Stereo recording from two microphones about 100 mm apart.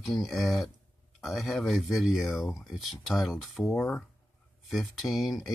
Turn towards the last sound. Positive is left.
turn(degrees=0)  # may be behind; listen again after turning